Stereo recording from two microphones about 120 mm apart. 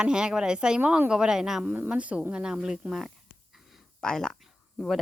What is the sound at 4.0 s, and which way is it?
Speech, 5° left (ahead or behind).